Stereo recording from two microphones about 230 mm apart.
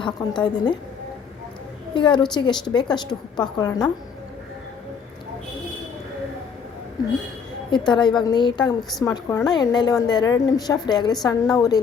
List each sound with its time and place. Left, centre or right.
0.0 s a woman's voice: centre
2.0 s a woman's voice: left
7.7 s a woman's voice: centre